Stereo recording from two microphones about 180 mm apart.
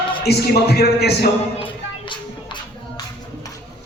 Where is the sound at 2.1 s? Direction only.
25° left (ahead or behind).